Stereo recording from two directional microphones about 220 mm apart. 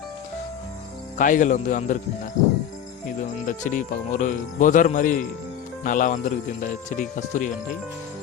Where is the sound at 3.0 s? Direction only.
35° left (ahead or behind).